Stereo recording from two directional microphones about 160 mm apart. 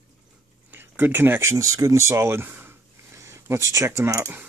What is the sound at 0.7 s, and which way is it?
Speech, 10° right (ahead or behind).